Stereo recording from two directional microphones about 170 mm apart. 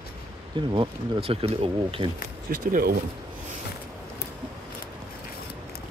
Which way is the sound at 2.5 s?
60° right (ahead or behind).